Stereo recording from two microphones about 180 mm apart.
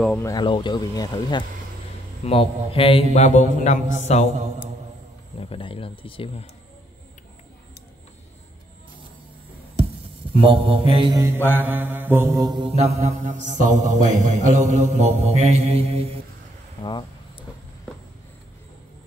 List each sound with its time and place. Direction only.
0.2 s speech: 20° left (ahead or behind)
2.2 s a man's voice: 35° left (ahead or behind)
5.4 s a man's voice: 30° left (ahead or behind)
10.3 s mantra: 30° right (ahead or behind)
16.8 s a sound: 25° left (ahead or behind)